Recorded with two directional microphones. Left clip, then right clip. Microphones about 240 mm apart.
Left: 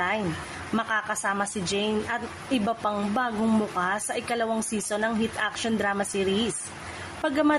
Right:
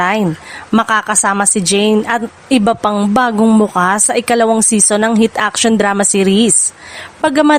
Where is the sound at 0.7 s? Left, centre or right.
Right.